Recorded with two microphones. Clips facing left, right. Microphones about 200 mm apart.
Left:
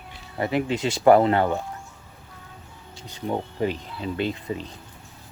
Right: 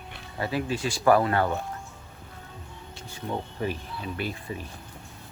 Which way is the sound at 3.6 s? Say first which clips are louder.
Left 5 dB; 20° left (ahead or behind).